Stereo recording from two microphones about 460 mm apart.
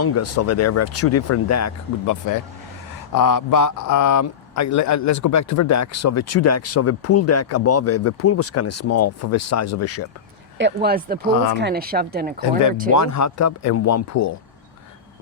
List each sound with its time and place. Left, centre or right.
0.0 s a man's voice: left
10.6 s speech: right
12.4 s a man's voice: left